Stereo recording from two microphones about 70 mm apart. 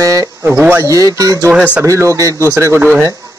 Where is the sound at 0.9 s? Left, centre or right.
Right.